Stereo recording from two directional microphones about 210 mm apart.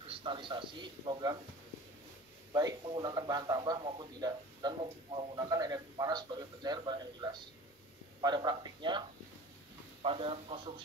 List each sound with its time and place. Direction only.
0.1 s a man's voice: 25° right (ahead or behind)
2.5 s a man's voice: 20° right (ahead or behind)
10.0 s a man's voice: 25° right (ahead or behind)